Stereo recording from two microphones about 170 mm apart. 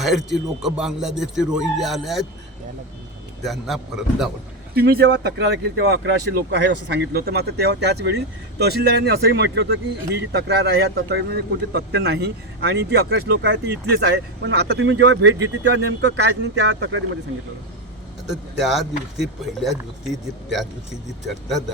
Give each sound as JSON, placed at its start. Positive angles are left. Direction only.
{"t": 0.0, "sound": "speech", "side_deg": 0}
{"t": 3.4, "sound": "speech", "side_deg": 0}
{"t": 4.7, "sound": "speech", "side_deg": -65}
{"t": 18.6, "sound": "speech", "side_deg": 0}